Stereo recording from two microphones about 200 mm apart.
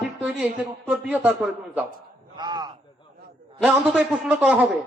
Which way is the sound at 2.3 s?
20° right (ahead or behind).